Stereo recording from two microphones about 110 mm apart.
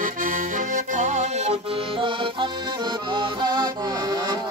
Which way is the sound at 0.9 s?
90° right.